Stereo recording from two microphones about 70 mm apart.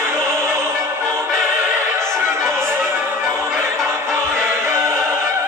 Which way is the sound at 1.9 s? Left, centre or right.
Right.